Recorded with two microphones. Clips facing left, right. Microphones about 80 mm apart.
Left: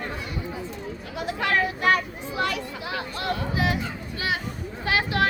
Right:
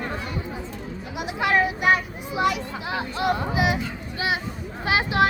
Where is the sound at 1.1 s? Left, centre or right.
Centre.